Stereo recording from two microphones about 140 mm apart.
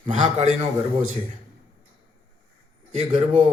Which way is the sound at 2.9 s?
45° right (ahead or behind).